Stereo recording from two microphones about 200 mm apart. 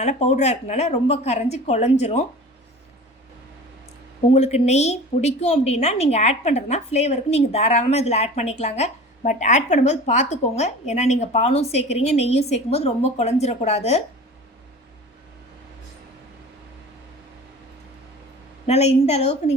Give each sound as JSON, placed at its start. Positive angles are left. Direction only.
{"t": 0.0, "sound": "a woman's voice", "side_deg": 35}
{"t": 4.3, "sound": "a woman's voice", "side_deg": 30}
{"t": 18.6, "sound": "a woman's voice", "side_deg": 30}